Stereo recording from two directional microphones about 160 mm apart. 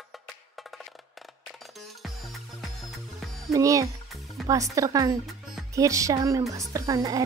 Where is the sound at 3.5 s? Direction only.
20° right (ahead or behind).